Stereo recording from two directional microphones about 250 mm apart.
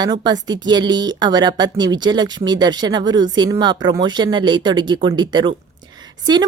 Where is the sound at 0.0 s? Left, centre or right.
Centre.